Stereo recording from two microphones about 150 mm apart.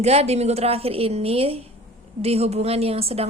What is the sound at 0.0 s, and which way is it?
A woman's voice, 45° right (ahead or behind).